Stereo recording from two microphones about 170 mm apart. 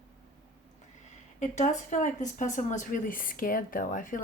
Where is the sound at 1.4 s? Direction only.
45° left (ahead or behind).